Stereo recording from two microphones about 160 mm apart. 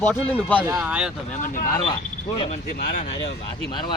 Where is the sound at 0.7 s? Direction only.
10° right (ahead or behind).